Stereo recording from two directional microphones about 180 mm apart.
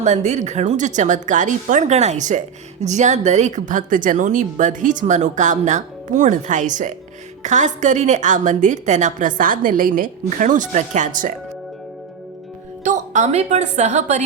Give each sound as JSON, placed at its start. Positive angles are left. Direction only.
{"t": 0.0, "sound": "a woman's voice", "side_deg": -40}
{"t": 12.8, "sound": "a woman's voice", "side_deg": -40}